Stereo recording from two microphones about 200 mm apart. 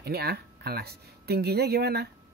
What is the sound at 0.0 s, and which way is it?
Speech, 50° right (ahead or behind).